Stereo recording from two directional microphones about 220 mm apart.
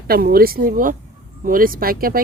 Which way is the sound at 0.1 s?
45° right (ahead or behind).